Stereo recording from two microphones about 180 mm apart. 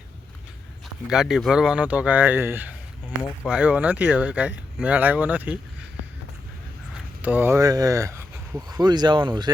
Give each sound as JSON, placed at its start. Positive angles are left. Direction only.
{"t": 1.1, "sound": "speech", "side_deg": 0}
{"t": 7.2, "sound": "speech", "side_deg": -10}